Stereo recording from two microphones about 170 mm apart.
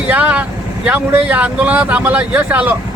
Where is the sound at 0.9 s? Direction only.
10° right (ahead or behind).